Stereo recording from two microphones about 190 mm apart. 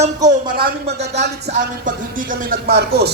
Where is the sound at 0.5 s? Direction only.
55° right (ahead or behind).